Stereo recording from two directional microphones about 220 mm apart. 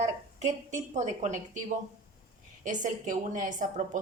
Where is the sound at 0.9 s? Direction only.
35° right (ahead or behind).